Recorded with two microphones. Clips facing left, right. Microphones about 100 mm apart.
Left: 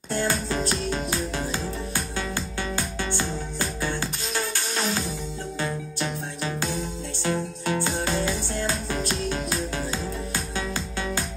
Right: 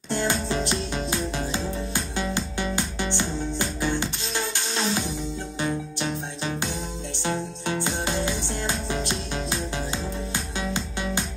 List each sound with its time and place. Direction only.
0.1 s music: 25° right (ahead or behind)